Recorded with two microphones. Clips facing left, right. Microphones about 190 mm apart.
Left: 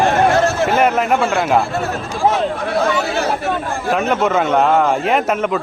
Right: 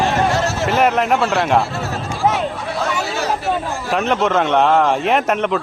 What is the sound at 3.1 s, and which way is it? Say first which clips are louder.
Chatter: left 1 dB; 55° left (ahead or behind).